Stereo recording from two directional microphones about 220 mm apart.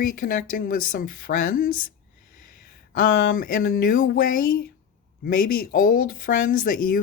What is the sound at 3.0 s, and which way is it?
Speech, 40° left (ahead or behind).